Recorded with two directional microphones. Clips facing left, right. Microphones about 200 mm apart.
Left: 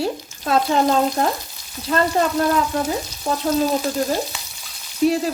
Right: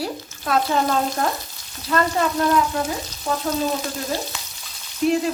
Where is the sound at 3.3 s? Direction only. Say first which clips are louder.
Left 1 dB; 35° left (ahead or behind).